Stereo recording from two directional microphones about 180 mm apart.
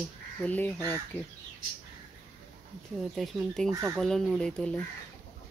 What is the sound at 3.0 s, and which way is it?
Speech, centre (ahead or behind).